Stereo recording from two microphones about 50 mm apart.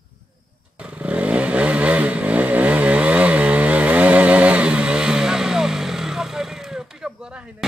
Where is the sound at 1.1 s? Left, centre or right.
Right; by 6.5 s centre.